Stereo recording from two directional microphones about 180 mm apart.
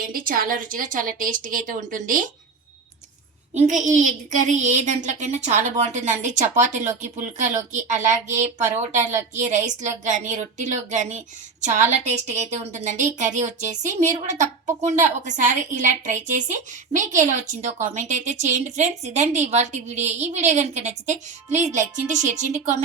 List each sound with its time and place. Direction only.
0.0 s a woman's voice: 50° right (ahead or behind)
3.5 s a woman's voice: 40° right (ahead or behind)